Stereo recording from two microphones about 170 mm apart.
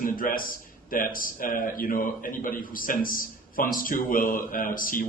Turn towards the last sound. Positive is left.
turn(degrees=55)  # may be behind; listen again after turning